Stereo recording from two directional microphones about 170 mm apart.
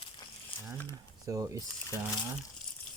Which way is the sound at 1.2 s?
20° right (ahead or behind).